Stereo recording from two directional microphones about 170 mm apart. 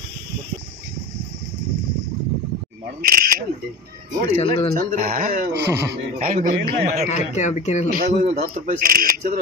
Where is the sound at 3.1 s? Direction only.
60° right (ahead or behind).